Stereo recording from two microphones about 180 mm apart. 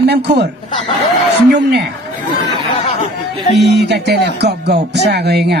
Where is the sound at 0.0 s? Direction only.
65° right (ahead or behind).